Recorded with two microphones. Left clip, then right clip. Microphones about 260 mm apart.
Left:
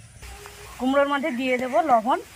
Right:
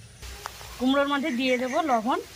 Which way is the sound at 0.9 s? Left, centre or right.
Centre.